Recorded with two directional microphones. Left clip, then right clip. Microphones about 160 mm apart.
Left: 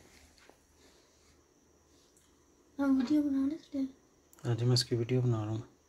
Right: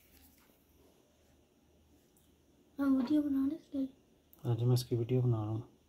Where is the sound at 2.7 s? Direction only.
30° left (ahead or behind).